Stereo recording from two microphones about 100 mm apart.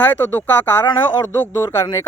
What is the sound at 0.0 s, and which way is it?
Speech, 20° left (ahead or behind).